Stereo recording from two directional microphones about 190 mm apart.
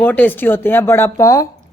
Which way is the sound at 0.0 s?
10° left (ahead or behind).